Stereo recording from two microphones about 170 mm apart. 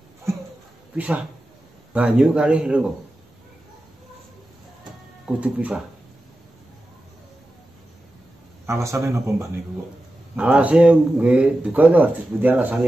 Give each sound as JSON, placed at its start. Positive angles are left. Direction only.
{"t": 0.9, "sound": "a man's voice", "side_deg": -10}
{"t": 5.2, "sound": "a man's voice", "side_deg": -5}
{"t": 8.6, "sound": "a man's voice", "side_deg": -15}
{"t": 10.3, "sound": "a man's voice", "side_deg": -5}